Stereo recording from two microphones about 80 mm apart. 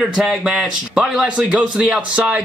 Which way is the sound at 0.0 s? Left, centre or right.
Centre.